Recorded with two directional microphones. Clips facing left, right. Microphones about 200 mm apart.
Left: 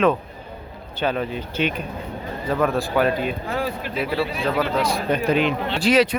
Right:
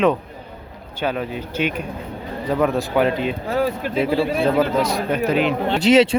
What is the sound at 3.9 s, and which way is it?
Speech, 25° right (ahead or behind).